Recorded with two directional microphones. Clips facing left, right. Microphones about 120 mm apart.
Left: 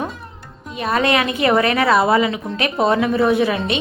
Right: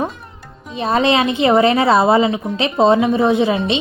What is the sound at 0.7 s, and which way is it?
A woman's voice, 25° right (ahead or behind).